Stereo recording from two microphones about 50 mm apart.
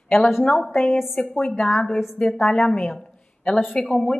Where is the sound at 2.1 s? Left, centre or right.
Left.